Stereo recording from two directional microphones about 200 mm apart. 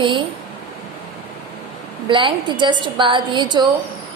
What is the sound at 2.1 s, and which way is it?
A woman's voice, 25° right (ahead or behind).